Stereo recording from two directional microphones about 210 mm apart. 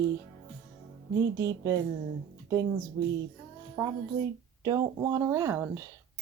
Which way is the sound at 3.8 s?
10° right (ahead or behind).